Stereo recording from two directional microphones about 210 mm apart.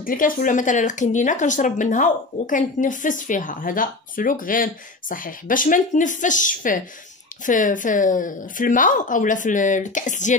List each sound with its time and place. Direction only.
0.0 s speech: 40° left (ahead or behind)